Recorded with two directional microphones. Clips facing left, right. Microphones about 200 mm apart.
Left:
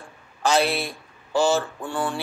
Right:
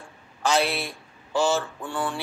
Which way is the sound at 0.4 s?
35° left (ahead or behind).